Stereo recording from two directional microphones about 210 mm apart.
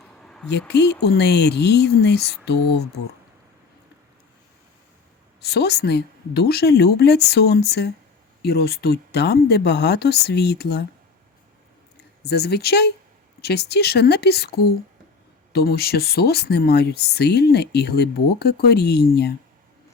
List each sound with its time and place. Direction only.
0.2 s a sound: 5° left (ahead or behind)
0.7 s speech: 55° left (ahead or behind)
5.4 s speech: 50° left (ahead or behind)
12.2 s speech: 50° left (ahead or behind)